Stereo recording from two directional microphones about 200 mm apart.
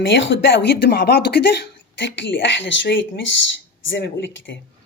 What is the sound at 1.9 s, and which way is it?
A woman's voice, 65° left (ahead or behind).